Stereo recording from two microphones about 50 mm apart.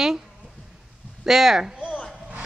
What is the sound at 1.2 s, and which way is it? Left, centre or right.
Speech, centre.